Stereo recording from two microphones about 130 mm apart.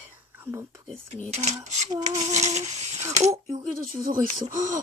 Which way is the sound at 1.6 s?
60° right (ahead or behind).